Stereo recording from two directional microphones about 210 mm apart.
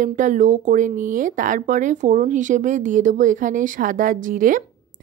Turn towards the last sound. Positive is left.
turn(degrees=-40)  # may be behind; listen again after turning